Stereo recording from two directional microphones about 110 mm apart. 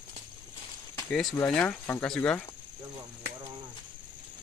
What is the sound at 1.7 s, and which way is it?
Speech, 20° left (ahead or behind).